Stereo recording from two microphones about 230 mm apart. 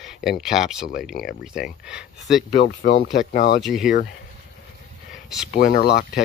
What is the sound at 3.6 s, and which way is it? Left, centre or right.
Speech, centre.